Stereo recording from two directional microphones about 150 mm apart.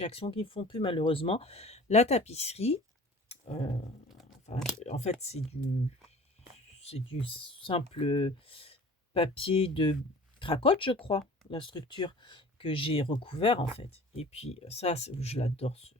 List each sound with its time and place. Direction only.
0.0 s speech: 40° left (ahead or behind)
3.2 s a sound: 45° left (ahead or behind)
4.8 s speech: 45° left (ahead or behind)
6.7 s speech: 40° left (ahead or behind)